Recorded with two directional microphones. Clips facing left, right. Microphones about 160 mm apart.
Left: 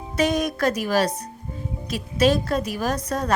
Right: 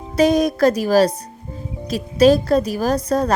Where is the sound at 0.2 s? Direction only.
35° right (ahead or behind).